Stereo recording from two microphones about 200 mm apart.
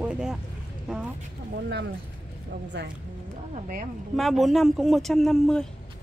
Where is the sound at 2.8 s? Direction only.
60° right (ahead or behind).